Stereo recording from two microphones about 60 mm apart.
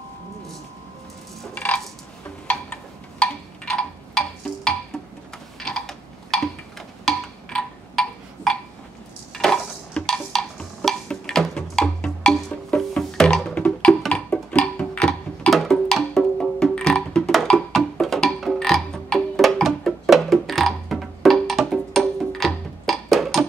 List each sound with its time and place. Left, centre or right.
1.5 s a sound: left
4.9 s music: centre
5.6 s a sound: centre
13.6 s music: centre
15.5 s music: centre
18.0 s music: centre
18.6 s frog: centre